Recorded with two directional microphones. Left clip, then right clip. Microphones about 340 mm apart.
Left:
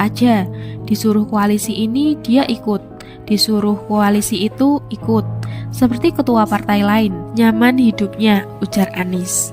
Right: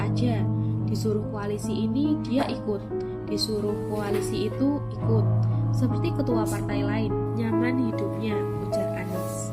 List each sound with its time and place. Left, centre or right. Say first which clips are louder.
0.0 s speech: left 13 dB; left